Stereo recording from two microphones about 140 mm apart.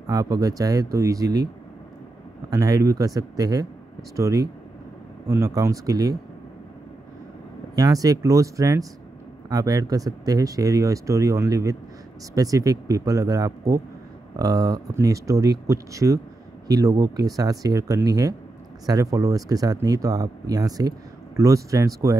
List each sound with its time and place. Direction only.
0.0 s speech: 25° right (ahead or behind)
2.5 s speech: 25° right (ahead or behind)
7.7 s speech: 25° right (ahead or behind)